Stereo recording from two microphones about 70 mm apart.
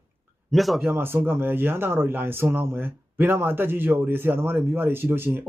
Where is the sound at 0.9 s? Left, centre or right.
Right.